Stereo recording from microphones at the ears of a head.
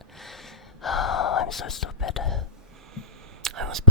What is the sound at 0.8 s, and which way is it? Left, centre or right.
Gasp, left.